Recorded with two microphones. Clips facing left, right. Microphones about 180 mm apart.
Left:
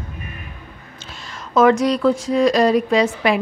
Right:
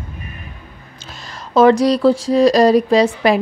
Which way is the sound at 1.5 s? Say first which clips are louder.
Right 3 dB; 30° right (ahead or behind).